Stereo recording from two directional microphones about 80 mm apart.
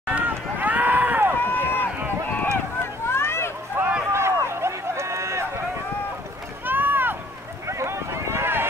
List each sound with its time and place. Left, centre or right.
0.1 s run: right
1.4 s run: left
3.1 s children playing: left
3.8 s a sound: right
4.5 s run: right
6.6 s a sound: right
7.6 s boat: right